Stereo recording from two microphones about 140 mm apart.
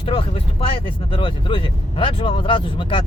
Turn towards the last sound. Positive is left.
turn(degrees=35)  # may be behind; listen again after turning